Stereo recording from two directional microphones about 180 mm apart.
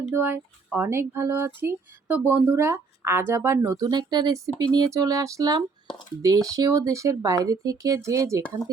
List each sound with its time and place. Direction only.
0.0 s speech: 10° right (ahead or behind)